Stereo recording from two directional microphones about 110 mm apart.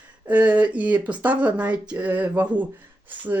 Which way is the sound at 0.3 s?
15° right (ahead or behind).